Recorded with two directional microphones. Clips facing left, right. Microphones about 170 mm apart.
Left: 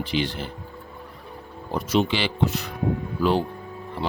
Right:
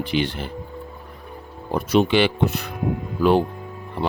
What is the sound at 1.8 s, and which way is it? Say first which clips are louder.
Speech: right 5 dB; 55° right (ahead or behind).